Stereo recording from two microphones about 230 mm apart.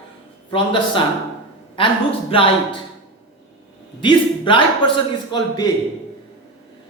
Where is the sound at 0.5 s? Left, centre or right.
Left.